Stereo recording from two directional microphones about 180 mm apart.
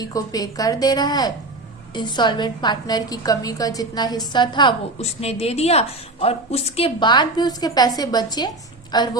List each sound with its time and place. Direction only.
0.0 s a woman's voice: 20° left (ahead or behind)